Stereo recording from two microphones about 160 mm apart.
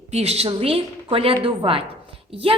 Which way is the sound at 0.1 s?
40° right (ahead or behind).